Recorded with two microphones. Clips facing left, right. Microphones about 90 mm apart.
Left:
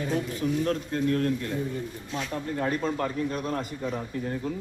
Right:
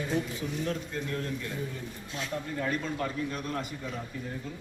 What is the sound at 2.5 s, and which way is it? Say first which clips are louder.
A man's voice: left 5 dB; 40° left (ahead or behind).